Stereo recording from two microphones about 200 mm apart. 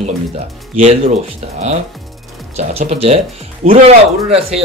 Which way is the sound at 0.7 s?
30° right (ahead or behind).